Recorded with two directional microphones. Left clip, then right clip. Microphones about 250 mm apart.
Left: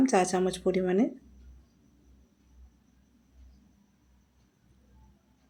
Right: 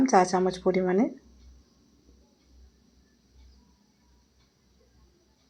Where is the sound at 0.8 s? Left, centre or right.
Centre.